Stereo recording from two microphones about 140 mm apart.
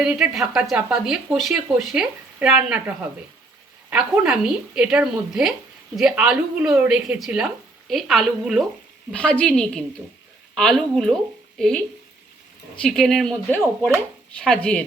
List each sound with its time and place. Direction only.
0.0 s a woman's voice: 5° right (ahead or behind)
12.8 s a woman's voice: centre (ahead or behind)